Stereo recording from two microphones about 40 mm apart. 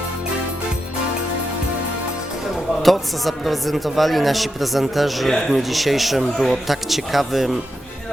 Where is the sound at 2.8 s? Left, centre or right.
Centre.